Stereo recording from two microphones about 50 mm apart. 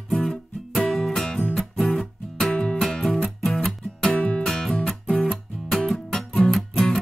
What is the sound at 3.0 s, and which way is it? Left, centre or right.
Music, centre.